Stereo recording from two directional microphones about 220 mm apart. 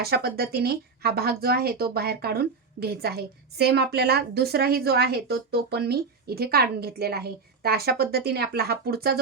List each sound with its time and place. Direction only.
0.0 s speech: 45° right (ahead or behind)